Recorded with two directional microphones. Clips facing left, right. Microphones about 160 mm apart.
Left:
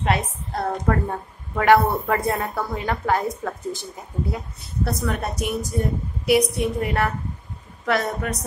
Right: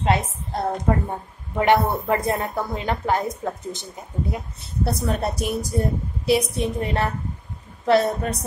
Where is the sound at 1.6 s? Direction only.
20° right (ahead or behind).